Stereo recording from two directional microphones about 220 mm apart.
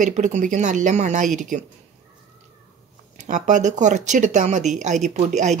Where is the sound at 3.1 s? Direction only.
35° right (ahead or behind).